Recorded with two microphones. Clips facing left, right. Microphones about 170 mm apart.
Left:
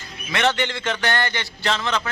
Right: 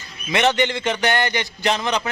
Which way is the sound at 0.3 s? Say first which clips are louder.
Right 3 dB; 20° right (ahead or behind).